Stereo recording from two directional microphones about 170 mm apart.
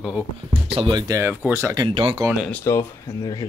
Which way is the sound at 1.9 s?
30° right (ahead or behind).